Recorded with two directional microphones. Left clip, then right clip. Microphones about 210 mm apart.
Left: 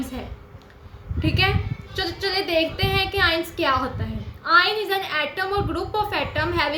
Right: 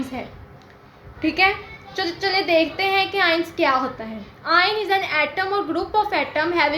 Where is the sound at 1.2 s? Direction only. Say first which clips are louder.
Right 4 dB; 40° left (ahead or behind).